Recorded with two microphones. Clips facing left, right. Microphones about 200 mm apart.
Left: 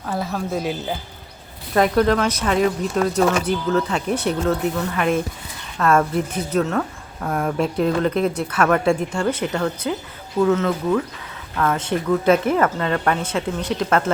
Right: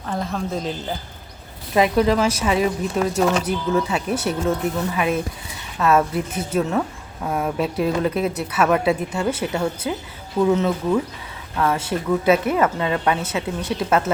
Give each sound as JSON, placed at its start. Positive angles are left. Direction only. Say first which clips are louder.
{"t": 0.0, "sound": "speech", "louder": "left 1 dB", "side_deg": 5}
{"t": 1.7, "sound": "speech", "louder": "even", "side_deg": -5}
{"t": 11.5, "sound": "speech", "louder": "even", "side_deg": -25}
{"t": 11.8, "sound": "speech", "louder": "left 1 dB", "side_deg": -5}